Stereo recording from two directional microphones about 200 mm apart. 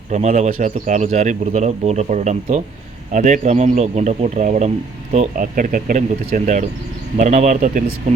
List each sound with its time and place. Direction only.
0.1 s speech: 35° right (ahead or behind)